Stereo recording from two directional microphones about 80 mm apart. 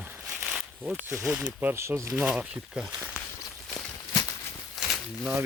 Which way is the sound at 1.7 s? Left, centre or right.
Right.